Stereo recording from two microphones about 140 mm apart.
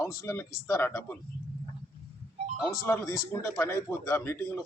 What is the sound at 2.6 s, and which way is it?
A man's voice, 20° left (ahead or behind).